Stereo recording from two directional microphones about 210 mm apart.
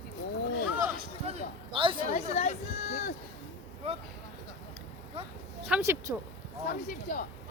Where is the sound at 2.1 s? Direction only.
30° left (ahead or behind).